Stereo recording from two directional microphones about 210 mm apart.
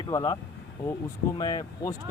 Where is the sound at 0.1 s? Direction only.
15° left (ahead or behind).